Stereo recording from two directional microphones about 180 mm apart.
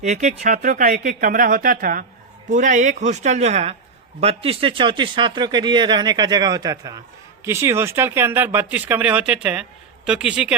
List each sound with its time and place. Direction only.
0.0 s speech: 40° right (ahead or behind); by 10.5 s 5° right (ahead or behind)